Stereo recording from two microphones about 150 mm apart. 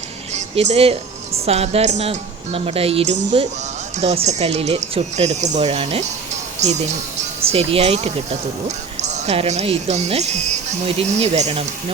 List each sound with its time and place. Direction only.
0.3 s speech: 45° right (ahead or behind)